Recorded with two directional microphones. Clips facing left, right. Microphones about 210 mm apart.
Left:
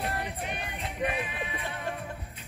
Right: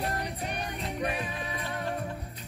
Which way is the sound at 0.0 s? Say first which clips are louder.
Right 1 dB; 40° right (ahead or behind).